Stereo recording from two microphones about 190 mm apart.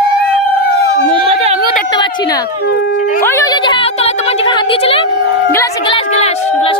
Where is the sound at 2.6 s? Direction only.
60° left (ahead or behind).